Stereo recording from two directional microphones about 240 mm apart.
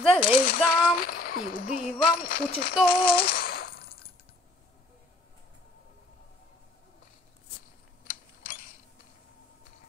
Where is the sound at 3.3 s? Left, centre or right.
Left.